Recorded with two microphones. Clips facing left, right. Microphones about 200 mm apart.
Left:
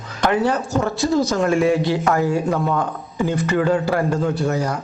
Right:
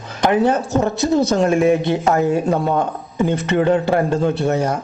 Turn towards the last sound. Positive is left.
turn(degrees=-25)  # may be behind; listen again after turning